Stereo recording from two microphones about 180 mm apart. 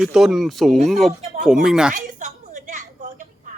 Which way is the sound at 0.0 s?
Centre (ahead or behind).